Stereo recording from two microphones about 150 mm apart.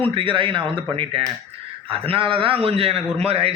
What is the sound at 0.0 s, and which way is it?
A man's voice, 35° right (ahead or behind).